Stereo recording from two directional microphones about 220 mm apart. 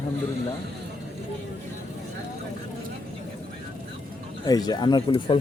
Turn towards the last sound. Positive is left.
turn(degrees=20)  # may be behind; listen again after turning